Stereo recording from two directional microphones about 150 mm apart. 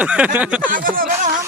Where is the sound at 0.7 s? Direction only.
65° right (ahead or behind).